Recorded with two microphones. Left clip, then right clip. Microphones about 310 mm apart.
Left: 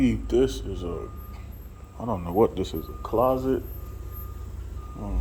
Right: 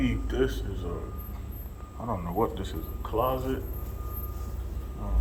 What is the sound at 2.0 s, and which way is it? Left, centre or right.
Speech, left.